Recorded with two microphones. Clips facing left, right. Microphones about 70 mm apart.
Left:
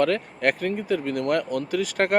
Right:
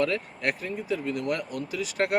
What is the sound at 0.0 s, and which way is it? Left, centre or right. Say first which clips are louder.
Speech: left 5 dB; left.